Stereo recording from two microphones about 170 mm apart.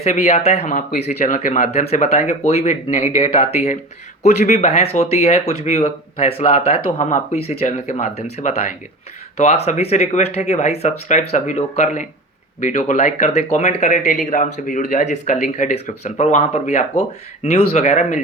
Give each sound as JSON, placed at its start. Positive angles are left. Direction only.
{"t": 0.0, "sound": "speech", "side_deg": 40}